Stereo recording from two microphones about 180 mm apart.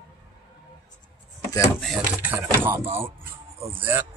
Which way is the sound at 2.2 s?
10° right (ahead or behind).